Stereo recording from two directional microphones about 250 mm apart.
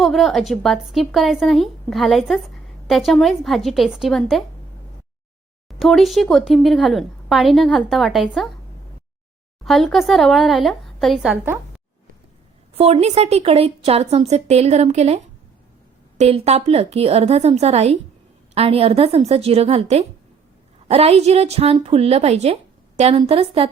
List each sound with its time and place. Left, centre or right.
0.0 s speech: centre
5.6 s speech: centre
9.6 s speech: centre
12.7 s a woman's voice: right